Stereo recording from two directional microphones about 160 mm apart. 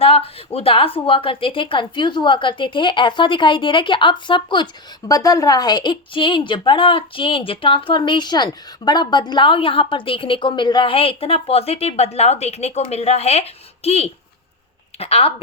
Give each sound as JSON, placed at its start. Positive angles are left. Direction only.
{"t": 0.0, "sound": "a woman's voice", "side_deg": 35}